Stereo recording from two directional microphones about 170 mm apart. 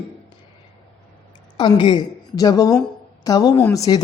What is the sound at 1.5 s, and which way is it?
A woman's voice, 25° left (ahead or behind).